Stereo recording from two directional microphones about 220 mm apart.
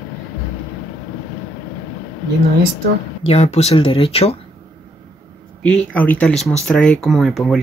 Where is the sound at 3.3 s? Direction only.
30° left (ahead or behind).